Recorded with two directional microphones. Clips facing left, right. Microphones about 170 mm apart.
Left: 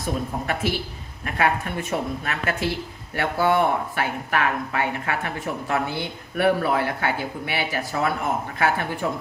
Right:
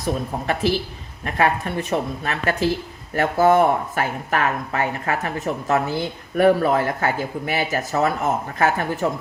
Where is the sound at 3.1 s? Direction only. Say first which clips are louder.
Right 5 dB; 40° right (ahead or behind).